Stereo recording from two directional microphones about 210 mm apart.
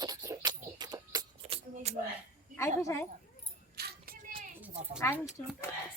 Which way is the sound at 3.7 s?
45° right (ahead or behind).